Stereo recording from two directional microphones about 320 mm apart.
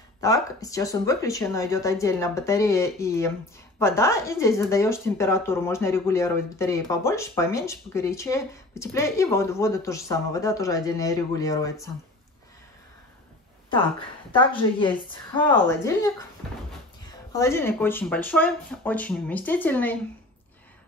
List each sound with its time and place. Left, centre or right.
0.2 s speech: centre
13.7 s speech: centre
17.3 s speech: centre